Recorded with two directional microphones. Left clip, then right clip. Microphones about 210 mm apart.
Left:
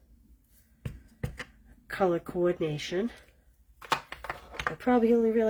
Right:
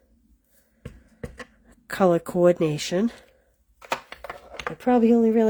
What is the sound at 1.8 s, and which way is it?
Speech, 50° right (ahead or behind).